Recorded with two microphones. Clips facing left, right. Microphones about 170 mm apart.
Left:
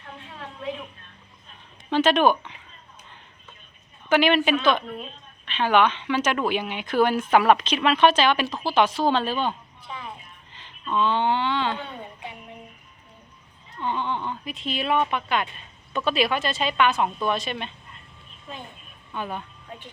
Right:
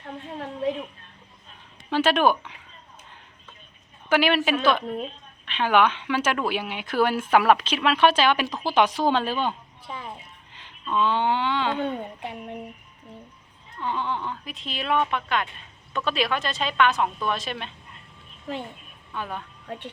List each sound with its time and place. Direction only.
0.0 s a sound: 40° right (ahead or behind)
1.9 s speech: 5° right (ahead or behind)
4.1 s speech: 5° right (ahead or behind)
5.5 s a woman's voice: 10° right (ahead or behind)
10.8 s a woman's voice: 10° right (ahead or behind)
11.8 s speech: 55° right (ahead or behind)
13.8 s speech: centre (ahead or behind)
18.5 s a child's voice: 75° right (ahead or behind)
19.1 s speech: centre (ahead or behind)